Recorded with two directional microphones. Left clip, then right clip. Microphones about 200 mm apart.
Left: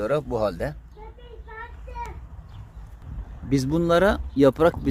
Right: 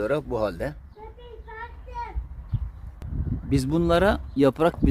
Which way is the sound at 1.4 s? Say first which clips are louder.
Even; 50° right (ahead or behind).